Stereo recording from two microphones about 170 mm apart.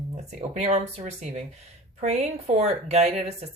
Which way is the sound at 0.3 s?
40° right (ahead or behind).